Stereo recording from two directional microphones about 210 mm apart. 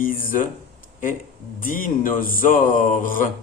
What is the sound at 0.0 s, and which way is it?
Speech, 40° left (ahead or behind).